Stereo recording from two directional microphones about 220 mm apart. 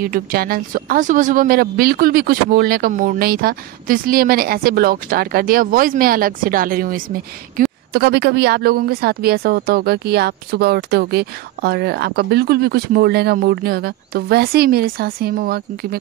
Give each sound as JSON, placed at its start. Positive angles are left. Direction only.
{"t": 0.0, "sound": "a woman's voice", "side_deg": -40}